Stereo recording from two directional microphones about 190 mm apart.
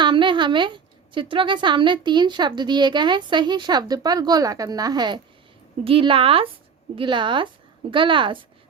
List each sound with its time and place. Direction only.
0.0 s a woman's voice: 25° right (ahead or behind)